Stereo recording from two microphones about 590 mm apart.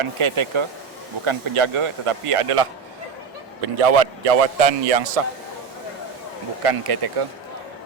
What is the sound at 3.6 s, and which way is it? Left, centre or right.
A man's voice, right.